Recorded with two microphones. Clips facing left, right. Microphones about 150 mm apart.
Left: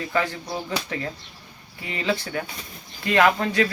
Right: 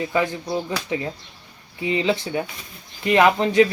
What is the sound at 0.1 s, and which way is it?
Speech, 20° right (ahead or behind).